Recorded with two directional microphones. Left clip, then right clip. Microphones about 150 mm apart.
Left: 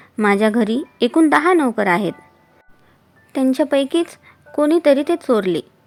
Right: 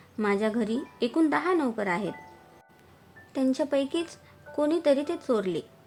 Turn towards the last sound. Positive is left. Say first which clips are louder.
# left 10 dB
turn(degrees=50)  # may be behind; listen again after turning